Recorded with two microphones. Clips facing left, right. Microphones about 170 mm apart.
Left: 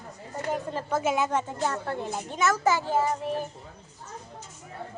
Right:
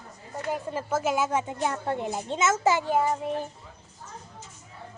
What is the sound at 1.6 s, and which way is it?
A child's voice, 20° right (ahead or behind).